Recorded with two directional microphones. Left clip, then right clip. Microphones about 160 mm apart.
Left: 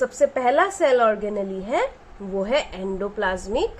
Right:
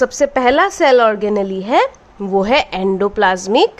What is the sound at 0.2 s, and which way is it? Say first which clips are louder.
Speech: right 4 dB; 40° right (ahead or behind).